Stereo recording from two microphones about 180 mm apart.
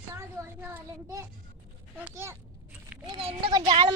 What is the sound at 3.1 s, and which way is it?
Speech, 30° right (ahead or behind).